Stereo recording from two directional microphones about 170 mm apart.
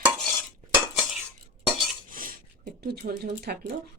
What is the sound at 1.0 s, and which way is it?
Cutlery, centre (ahead or behind).